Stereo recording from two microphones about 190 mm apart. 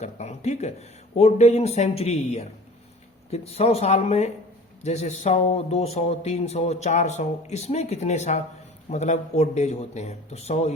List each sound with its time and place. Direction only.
0.0 s speech: 35° left (ahead or behind)